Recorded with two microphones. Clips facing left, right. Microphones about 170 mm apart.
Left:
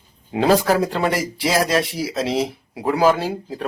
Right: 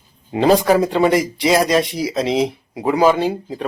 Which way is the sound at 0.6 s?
10° right (ahead or behind).